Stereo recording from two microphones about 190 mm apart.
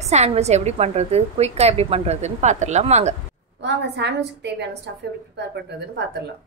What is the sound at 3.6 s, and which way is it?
A woman's voice, 65° right (ahead or behind).